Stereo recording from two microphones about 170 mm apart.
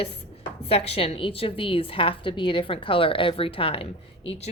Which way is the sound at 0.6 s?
35° left (ahead or behind).